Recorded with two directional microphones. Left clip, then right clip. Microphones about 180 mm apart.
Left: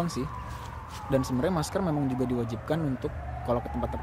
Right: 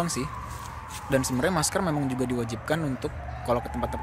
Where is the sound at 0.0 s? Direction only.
Centre (ahead or behind).